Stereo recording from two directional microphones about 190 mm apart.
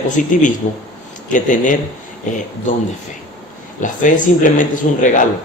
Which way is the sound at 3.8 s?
45° left (ahead or behind).